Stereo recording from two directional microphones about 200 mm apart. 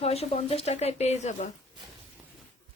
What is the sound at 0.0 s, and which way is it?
Speech, 30° left (ahead or behind).